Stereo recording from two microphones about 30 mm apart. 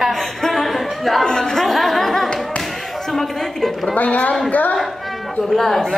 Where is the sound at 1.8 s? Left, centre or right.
Centre.